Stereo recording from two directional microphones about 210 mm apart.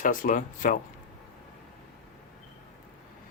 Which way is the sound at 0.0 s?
40° left (ahead or behind).